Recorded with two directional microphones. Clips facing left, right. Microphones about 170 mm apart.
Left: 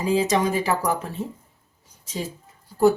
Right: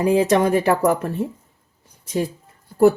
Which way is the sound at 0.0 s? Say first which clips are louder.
Right 5 dB; 60° right (ahead or behind).